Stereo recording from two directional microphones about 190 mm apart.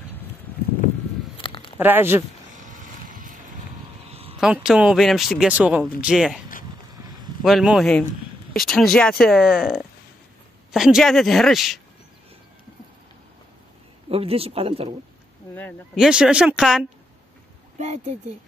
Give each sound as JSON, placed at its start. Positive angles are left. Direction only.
{"t": 1.3, "sound": "a sound", "side_deg": 25}
{"t": 1.8, "sound": "speech", "side_deg": -10}
{"t": 2.5, "sound": "vehicle", "side_deg": -40}
{"t": 4.1, "sound": "a sound", "side_deg": -30}
{"t": 4.4, "sound": "speech", "side_deg": -5}
{"t": 7.4, "sound": "speech", "side_deg": 0}
{"t": 14.0, "sound": "speech", "side_deg": -30}
{"t": 15.5, "sound": "speech", "side_deg": 10}
{"t": 16.0, "sound": "speech", "side_deg": -5}
{"t": 17.7, "sound": "speech", "side_deg": -35}